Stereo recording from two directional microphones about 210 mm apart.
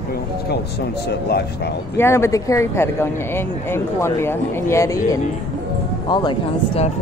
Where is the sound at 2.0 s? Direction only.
10° left (ahead or behind).